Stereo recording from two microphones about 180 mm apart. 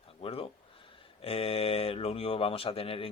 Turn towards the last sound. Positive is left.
turn(degrees=30)  # may be behind; listen again after turning